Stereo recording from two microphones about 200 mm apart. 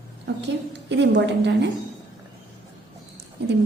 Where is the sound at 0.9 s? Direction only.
60° right (ahead or behind).